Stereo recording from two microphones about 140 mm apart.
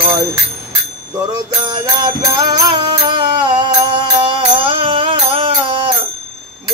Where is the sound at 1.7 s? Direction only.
30° right (ahead or behind).